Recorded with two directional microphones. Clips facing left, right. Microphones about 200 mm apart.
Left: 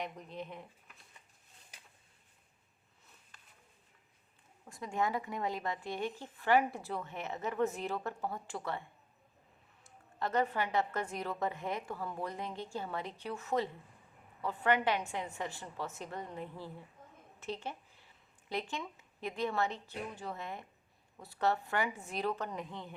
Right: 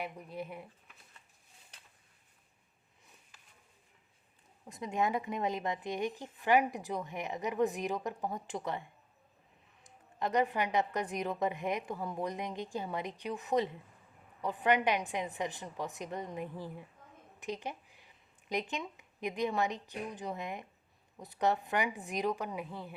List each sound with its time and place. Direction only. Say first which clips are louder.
0.0 s a woman's voice: right 1 dB; 10° right (ahead or behind)
4.6 s a woman's voice: right 2 dB; 20° right (ahead or behind)